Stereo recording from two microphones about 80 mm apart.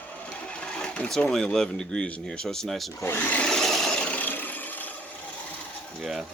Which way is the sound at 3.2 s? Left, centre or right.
Left.